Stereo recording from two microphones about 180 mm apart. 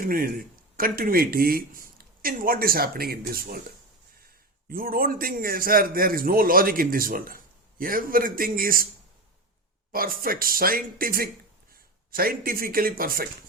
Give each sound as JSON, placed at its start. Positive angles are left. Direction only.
{"t": 0.0, "sound": "speech", "side_deg": -50}
{"t": 4.7, "sound": "a man's voice", "side_deg": -55}
{"t": 9.9, "sound": "a man's voice", "side_deg": -55}